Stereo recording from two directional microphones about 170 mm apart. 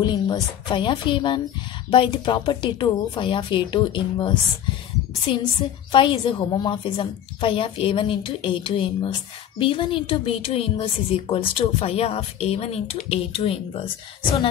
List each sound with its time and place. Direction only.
0.0 s a woman's voice: 25° left (ahead or behind)